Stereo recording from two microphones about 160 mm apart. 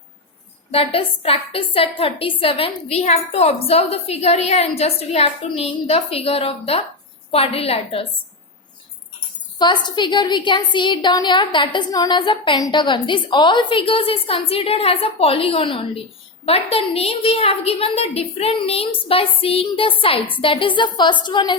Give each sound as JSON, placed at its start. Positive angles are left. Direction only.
{"t": 0.7, "sound": "a woman's voice", "side_deg": 35}
{"t": 9.6, "sound": "a woman's voice", "side_deg": 25}